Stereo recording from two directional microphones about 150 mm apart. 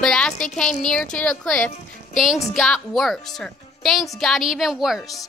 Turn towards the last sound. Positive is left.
turn(degrees=0)  # may be behind; listen again after turning